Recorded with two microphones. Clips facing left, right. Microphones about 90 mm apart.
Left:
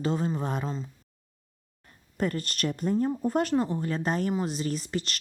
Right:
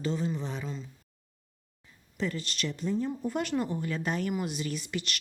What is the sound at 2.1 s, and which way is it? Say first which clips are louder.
A woman's voice: left 4 dB; 50° left (ahead or behind).